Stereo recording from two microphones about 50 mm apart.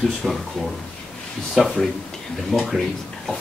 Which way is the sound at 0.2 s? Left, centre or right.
Centre.